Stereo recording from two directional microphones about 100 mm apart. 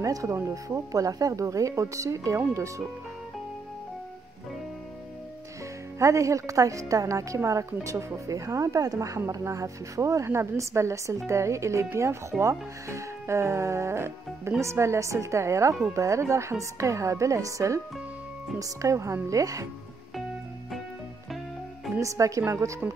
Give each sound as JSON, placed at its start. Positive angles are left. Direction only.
{"t": 0.0, "sound": "a woman's voice", "side_deg": -35}
{"t": 5.9, "sound": "a woman's voice", "side_deg": -30}
{"t": 22.0, "sound": "a woman's voice", "side_deg": -30}